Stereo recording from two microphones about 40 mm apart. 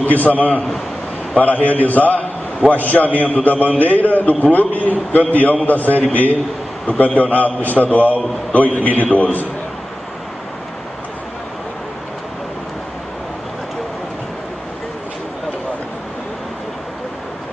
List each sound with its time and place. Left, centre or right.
0.0 s a man's voice: left